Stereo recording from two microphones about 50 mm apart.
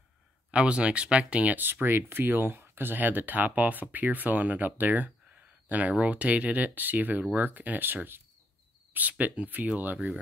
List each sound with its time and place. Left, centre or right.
0.5 s speech: right